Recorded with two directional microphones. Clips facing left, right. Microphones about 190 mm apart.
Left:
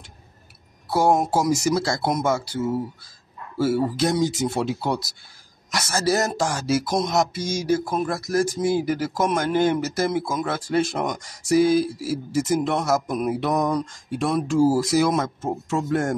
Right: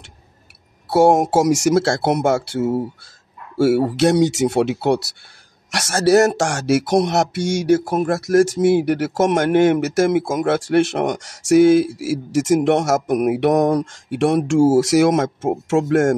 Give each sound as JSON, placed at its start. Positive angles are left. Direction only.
{"t": 0.9, "sound": "speech", "side_deg": -75}